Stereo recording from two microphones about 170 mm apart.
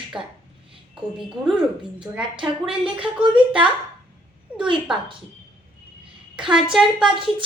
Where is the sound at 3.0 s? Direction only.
30° right (ahead or behind).